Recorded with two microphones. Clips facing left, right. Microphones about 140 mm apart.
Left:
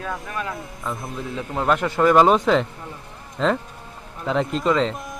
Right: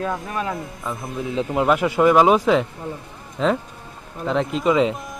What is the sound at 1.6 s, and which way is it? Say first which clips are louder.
Speech: right 1 dB; 5° right (ahead or behind).